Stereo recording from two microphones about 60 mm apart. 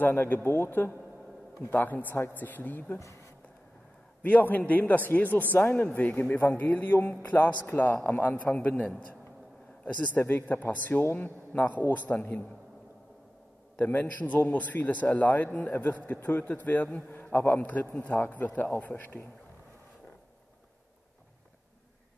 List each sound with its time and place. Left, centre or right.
0.0 s a man's voice: left
4.2 s a man's voice: left
10.1 s a man's voice: left
13.7 s a man's voice: left